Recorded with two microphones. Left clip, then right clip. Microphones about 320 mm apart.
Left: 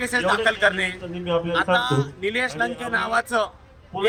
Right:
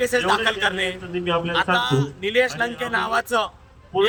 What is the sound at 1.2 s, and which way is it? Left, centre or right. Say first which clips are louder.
Speech: even; left.